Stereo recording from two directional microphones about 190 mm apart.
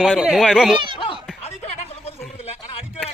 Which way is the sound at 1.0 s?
30° left (ahead or behind).